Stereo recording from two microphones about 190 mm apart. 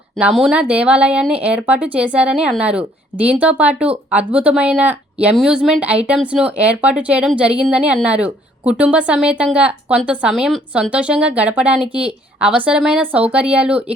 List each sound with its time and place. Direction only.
0.2 s speech: 5° right (ahead or behind)